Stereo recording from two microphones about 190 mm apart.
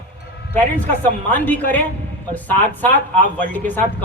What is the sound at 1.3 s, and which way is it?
Speech, 10° left (ahead or behind).